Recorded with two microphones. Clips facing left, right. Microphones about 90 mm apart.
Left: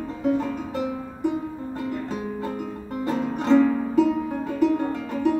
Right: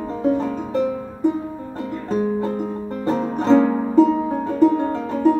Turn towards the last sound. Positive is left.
turn(degrees=-35)  # may be behind; listen again after turning